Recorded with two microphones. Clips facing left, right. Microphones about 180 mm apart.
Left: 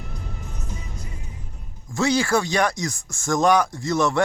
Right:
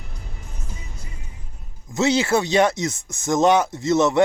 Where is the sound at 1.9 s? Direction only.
20° right (ahead or behind).